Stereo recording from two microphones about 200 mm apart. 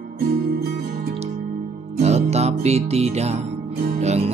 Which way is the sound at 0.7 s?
50° right (ahead or behind).